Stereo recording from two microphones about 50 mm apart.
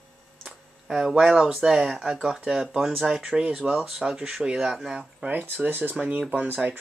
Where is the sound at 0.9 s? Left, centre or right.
Centre.